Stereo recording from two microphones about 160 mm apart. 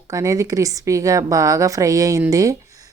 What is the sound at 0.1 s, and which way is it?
Speech, 20° right (ahead or behind).